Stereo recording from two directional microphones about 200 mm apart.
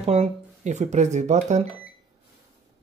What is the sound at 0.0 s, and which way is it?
Speech, 35° right (ahead or behind).